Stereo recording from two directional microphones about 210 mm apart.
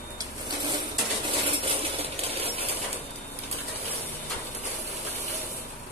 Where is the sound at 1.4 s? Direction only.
25° right (ahead or behind).